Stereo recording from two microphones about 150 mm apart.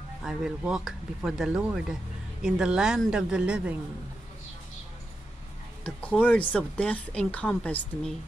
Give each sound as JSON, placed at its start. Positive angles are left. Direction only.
{"t": 0.2, "sound": "speech", "side_deg": -5}
{"t": 5.9, "sound": "speech", "side_deg": 10}